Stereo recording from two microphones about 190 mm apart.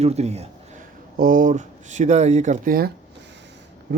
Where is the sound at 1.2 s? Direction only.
45° right (ahead or behind).